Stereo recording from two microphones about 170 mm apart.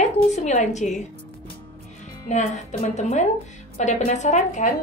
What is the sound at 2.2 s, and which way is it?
A woman's voice, 45° left (ahead or behind).